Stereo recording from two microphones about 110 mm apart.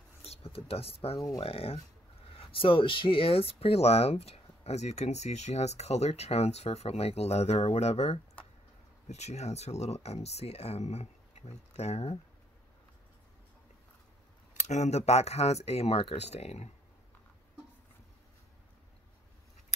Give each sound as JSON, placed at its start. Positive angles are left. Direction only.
{"t": 0.2, "sound": "speech", "side_deg": 65}
{"t": 9.1, "sound": "speech", "side_deg": 90}
{"t": 14.7, "sound": "speech", "side_deg": 85}